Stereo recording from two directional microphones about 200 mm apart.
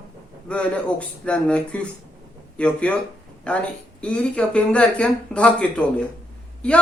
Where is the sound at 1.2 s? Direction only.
5° left (ahead or behind).